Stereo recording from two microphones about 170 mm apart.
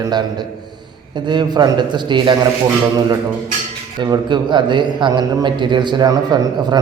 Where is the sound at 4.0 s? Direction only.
25° right (ahead or behind).